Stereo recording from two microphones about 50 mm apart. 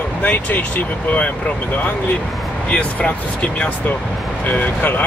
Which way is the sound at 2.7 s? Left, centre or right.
Left.